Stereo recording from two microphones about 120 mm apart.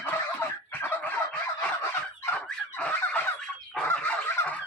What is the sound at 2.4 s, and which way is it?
Fowl, 15° left (ahead or behind).